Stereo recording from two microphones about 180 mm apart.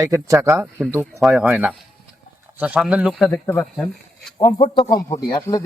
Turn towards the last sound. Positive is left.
turn(degrees=20)  # may be behind; listen again after turning